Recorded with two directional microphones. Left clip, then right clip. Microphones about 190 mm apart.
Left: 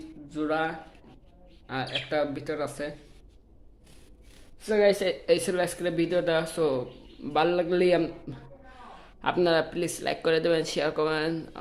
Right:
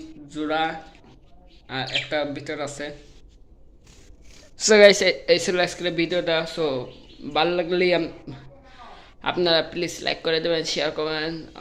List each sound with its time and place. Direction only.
0.3 s speech: centre (ahead or behind)
4.5 s speech: 30° right (ahead or behind)
4.9 s speech: 10° right (ahead or behind); by 11.6 s 10° left (ahead or behind)